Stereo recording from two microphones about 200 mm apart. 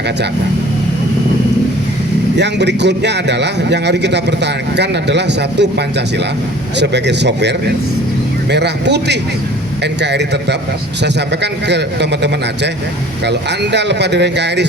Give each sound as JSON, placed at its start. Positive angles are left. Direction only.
{"t": 2.4, "sound": "a man's voice", "side_deg": -60}
{"t": 11.7, "sound": "a man's voice", "side_deg": -60}